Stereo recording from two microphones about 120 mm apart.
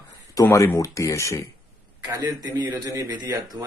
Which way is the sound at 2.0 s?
30° right (ahead or behind).